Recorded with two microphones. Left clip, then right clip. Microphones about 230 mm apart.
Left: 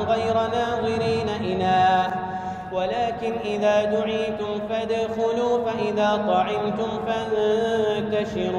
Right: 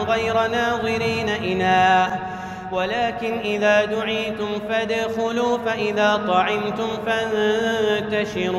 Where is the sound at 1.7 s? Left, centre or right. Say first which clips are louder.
Right 3 dB; right.